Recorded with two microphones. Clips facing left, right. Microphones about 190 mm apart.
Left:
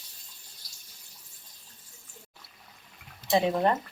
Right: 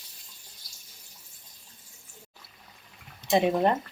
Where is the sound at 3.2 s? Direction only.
15° right (ahead or behind).